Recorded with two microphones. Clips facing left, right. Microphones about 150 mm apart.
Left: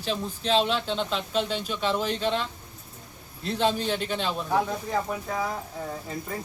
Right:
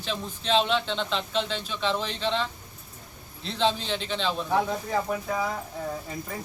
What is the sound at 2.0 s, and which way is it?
A man's voice, 45° left (ahead or behind).